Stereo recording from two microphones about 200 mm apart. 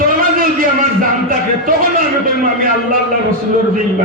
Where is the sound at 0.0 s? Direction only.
45° right (ahead or behind).